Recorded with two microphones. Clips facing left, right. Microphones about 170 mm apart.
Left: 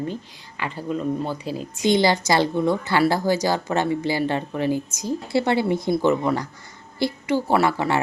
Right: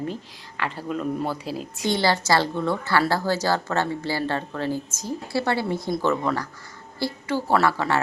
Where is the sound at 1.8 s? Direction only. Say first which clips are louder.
Left 4 dB; 15° left (ahead or behind).